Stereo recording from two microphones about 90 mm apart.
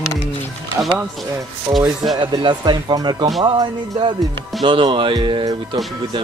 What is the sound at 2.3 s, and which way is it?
Speech, 55° right (ahead or behind).